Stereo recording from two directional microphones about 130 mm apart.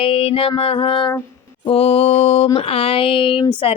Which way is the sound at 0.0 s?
45° left (ahead or behind).